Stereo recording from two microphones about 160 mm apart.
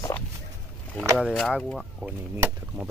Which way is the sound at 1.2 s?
Centre (ahead or behind).